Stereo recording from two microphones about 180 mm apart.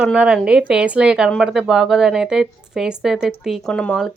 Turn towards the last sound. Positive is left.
turn(degrees=5)  # may be behind; listen again after turning